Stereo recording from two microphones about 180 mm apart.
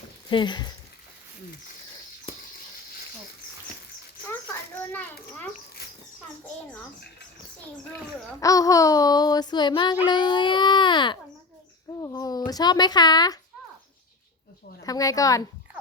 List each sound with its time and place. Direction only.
0.3 s a child's voice: 25° left (ahead or behind)
4.8 s a sound: 10° left (ahead or behind)
8.4 s a child's voice: 20° left (ahead or behind)
14.8 s a child's voice: 20° left (ahead or behind)